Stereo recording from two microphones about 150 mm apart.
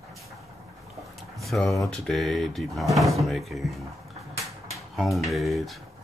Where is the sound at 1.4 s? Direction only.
Centre (ahead or behind).